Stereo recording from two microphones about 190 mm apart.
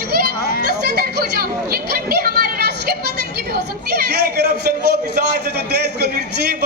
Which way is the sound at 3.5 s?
55° right (ahead or behind).